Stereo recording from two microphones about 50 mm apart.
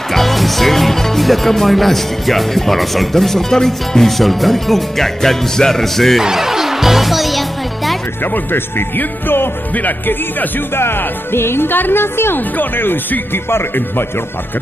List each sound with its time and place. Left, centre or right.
0.1 s speech: centre
6.2 s music: centre
8.2 s speech: left
9.8 s speech: left
10.7 s speech: left